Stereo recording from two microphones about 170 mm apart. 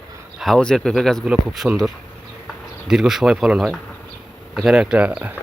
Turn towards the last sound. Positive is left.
turn(degrees=-10)  # may be behind; listen again after turning